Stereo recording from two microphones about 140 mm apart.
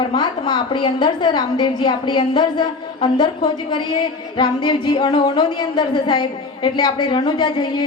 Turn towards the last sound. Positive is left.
turn(degrees=35)  # may be behind; listen again after turning